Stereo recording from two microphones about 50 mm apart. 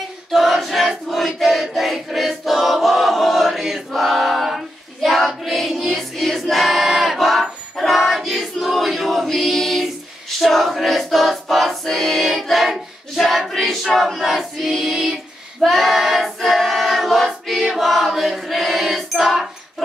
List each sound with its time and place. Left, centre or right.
0.3 s a sound: centre
10.4 s choir: centre
15.6 s female singing: centre
16.3 s choir: centre